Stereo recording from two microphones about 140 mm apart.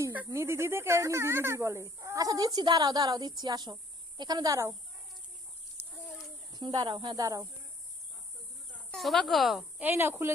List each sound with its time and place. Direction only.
0.0 s snake: 15° right (ahead or behind)
0.3 s speech: 20° right (ahead or behind)
6.5 s speech: 30° right (ahead or behind)
8.9 s speech: centre (ahead or behind)
9.8 s speech: 15° right (ahead or behind)